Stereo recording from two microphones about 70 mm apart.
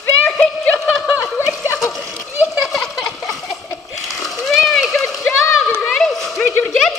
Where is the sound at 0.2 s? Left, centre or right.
Left.